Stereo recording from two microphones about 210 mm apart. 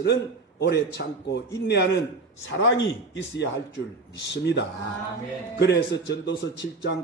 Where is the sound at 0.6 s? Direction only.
50° left (ahead or behind).